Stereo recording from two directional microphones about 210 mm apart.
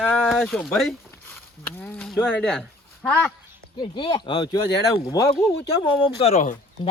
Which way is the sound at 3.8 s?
25° left (ahead or behind).